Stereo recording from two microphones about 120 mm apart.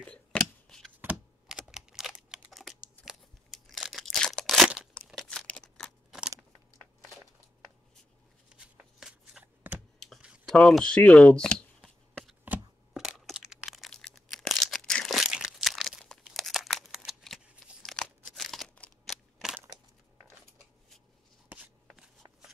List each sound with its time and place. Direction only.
0.0 s scissors: 10° left (ahead or behind)
1.1 s typing: 5° right (ahead or behind)
3.1 s crunch: centre (ahead or behind)
5.0 s crumpling: centre (ahead or behind)
8.5 s shuffling cards: 5° right (ahead or behind)
9.9 s a sound: 5° left (ahead or behind)
10.2 s a sound: 5° right (ahead or behind)
10.5 s shuffling cards: 5° left (ahead or behind)
12.4 s crack: 5° right (ahead or behind)
17.8 s crumpling: 5° left (ahead or behind)
21.5 s shuffling cards: 10° right (ahead or behind)